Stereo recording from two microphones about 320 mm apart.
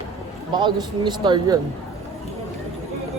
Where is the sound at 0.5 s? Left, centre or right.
Centre.